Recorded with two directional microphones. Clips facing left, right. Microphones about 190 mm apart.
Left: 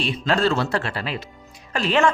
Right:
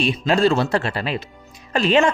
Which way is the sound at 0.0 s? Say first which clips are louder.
Right 4 dB; 15° right (ahead or behind).